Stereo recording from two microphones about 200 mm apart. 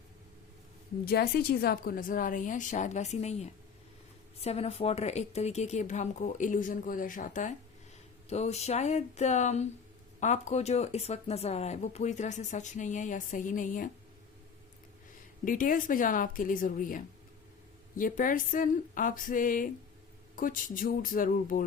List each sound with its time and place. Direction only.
1.0 s a woman's voice: 50° left (ahead or behind)
15.4 s a woman's voice: 45° left (ahead or behind)